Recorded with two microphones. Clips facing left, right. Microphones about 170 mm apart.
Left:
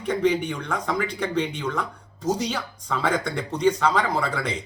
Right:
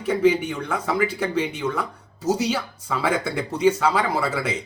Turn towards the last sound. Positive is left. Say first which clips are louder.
# right 2 dB
turn(degrees=-5)  # may be behind; listen again after turning